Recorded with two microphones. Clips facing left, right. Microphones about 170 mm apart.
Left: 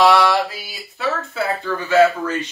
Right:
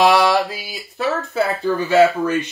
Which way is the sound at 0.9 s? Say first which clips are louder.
Right 3 dB; 35° right (ahead or behind).